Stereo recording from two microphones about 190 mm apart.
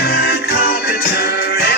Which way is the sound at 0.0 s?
55° left (ahead or behind).